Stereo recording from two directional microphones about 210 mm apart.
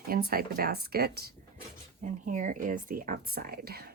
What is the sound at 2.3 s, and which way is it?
Speech, 40° right (ahead or behind).